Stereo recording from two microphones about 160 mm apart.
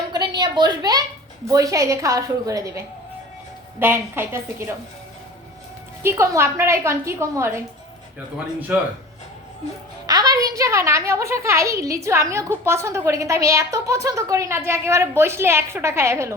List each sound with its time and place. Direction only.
0.3 s a woman's voice: 25° right (ahead or behind)
6.0 s a woman's voice: 15° right (ahead or behind)
8.7 s a woman's voice: 10° right (ahead or behind)
10.1 s a woman's voice: 25° right (ahead or behind)